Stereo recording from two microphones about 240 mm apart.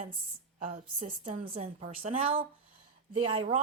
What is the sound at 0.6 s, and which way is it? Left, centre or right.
A woman's voice, right.